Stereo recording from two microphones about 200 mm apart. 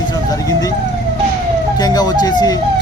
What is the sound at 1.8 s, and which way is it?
Speech, 20° left (ahead or behind).